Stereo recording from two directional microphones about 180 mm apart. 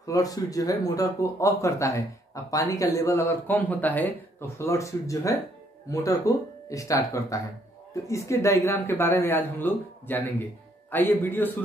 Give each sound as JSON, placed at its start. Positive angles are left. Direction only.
{"t": 0.0, "sound": "speech", "side_deg": 20}